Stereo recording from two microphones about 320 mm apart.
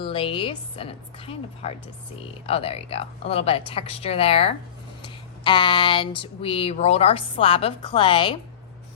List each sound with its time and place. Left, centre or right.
0.0 s speech: centre